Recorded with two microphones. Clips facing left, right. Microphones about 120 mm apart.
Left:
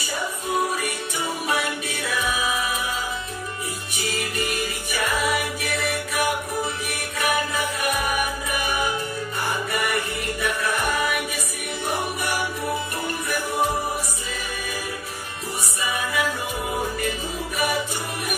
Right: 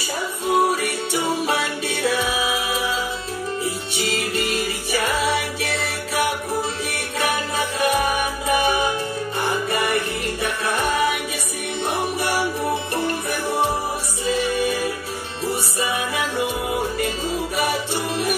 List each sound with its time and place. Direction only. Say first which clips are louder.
0.6 s music: right 5 dB; 70° right (ahead or behind)
1.2 s music: right 2 dB; 30° right (ahead or behind)
2.1 s music: right 2 dB; 90° right
5.2 s music: right 2 dB; 30° right (ahead or behind)
11.8 s music: right 3 dB; 25° right (ahead or behind)